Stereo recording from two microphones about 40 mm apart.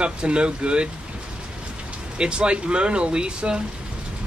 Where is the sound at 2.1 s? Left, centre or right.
Right.